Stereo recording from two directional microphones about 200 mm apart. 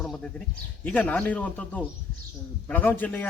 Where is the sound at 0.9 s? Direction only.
5° left (ahead or behind).